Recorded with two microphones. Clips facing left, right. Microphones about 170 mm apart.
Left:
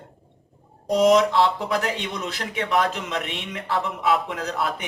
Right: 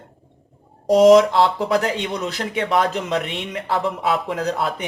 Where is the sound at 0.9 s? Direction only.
35° right (ahead or behind).